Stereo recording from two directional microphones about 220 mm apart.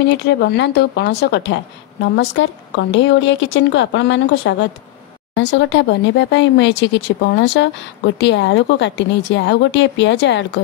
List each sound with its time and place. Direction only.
0.2 s speech: 50° left (ahead or behind)